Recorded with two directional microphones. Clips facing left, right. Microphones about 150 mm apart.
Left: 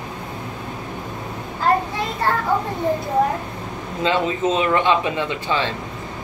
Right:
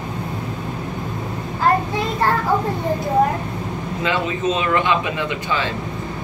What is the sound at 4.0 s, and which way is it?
Speech, 30° left (ahead or behind).